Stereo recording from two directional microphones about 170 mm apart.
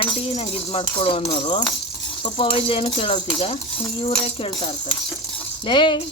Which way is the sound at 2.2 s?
30° left (ahead or behind).